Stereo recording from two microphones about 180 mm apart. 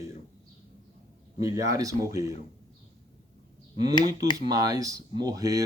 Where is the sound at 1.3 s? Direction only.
20° right (ahead or behind).